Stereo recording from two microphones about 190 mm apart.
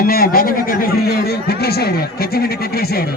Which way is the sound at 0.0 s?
50° left (ahead or behind).